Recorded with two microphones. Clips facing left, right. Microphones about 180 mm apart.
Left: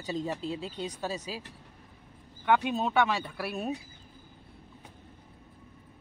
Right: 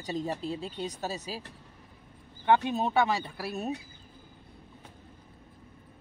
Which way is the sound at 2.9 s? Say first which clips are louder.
Even; 35° right (ahead or behind).